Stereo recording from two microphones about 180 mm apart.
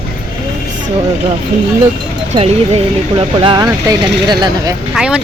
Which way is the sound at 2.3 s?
35° right (ahead or behind).